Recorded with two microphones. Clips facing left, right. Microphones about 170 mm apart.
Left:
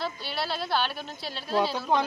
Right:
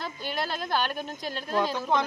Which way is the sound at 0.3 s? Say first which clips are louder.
Right 3 dB; 45° right (ahead or behind).